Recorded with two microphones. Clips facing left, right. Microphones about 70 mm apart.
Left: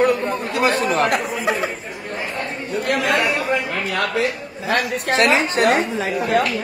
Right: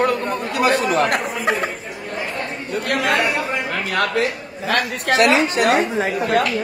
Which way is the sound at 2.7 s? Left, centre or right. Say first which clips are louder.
Even; right.